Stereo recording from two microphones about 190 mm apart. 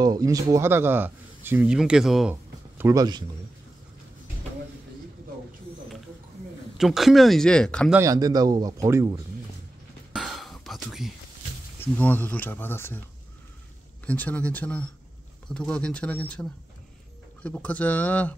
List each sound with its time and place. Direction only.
0.0 s speech: 20° right (ahead or behind); by 2.3 s centre (ahead or behind)
2.8 s a man's voice: 15° right (ahead or behind)
6.8 s speech: centre (ahead or behind)
7.9 s a man's voice: 15° right (ahead or behind)
10.1 s whispering: centre (ahead or behind)
11.8 s speech: 10° left (ahead or behind)
14.0 s speech: 10° left (ahead or behind)